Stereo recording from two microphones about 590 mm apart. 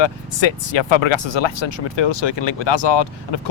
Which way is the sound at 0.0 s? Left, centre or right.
Left.